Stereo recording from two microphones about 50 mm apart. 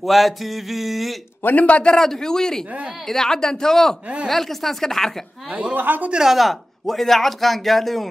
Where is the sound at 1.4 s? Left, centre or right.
Left.